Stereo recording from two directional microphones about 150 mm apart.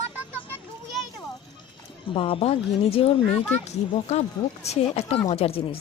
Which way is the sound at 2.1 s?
35° left (ahead or behind).